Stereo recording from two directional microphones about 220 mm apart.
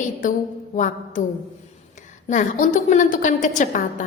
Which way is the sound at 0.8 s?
35° left (ahead or behind).